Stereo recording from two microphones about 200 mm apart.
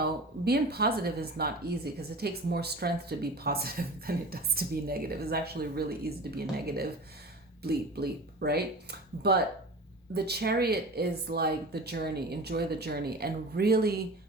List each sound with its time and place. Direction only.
0.0 s speech: 50° right (ahead or behind)